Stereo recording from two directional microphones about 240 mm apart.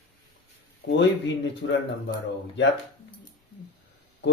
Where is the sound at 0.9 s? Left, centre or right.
Left.